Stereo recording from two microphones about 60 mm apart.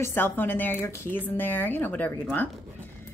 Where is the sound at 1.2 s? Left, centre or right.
Left.